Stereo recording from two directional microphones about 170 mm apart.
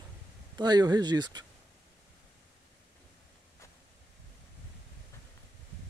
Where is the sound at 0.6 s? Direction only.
25° right (ahead or behind).